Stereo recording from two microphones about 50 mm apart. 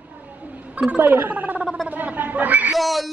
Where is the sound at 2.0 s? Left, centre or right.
Right.